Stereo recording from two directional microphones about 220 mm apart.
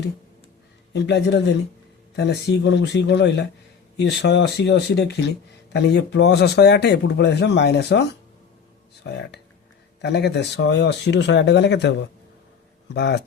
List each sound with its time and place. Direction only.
0.9 s speech: 50° left (ahead or behind)
9.0 s speech: 50° left (ahead or behind)